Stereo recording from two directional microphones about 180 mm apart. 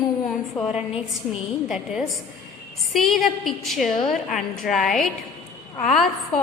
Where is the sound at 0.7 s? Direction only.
5° right (ahead or behind).